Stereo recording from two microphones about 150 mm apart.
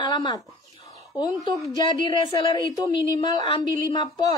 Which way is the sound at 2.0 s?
30° left (ahead or behind).